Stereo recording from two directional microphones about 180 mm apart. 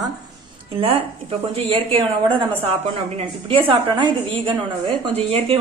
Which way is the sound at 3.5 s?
30° right (ahead or behind).